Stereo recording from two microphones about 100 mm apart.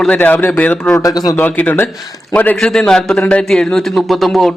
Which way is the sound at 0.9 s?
35° left (ahead or behind).